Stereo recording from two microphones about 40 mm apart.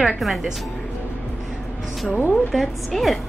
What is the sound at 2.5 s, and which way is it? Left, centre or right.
Speech, centre.